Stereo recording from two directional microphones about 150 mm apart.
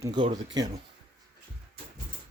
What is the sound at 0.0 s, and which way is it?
Speech, 30° right (ahead or behind).